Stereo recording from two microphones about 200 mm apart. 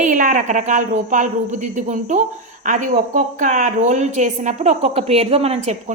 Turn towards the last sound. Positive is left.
turn(degrees=-30)  # may be behind; listen again after turning